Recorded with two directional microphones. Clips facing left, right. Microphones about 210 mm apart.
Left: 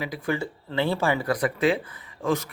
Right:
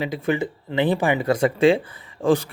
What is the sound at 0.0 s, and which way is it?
A man's voice, 25° right (ahead or behind).